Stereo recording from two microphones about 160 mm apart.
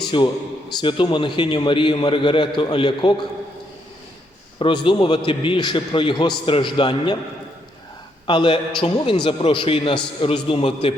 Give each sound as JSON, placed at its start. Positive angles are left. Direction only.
{"t": 0.1, "sound": "a man's voice", "side_deg": 30}
{"t": 4.6, "sound": "a man's voice", "side_deg": 30}
{"t": 8.3, "sound": "a man's voice", "side_deg": 30}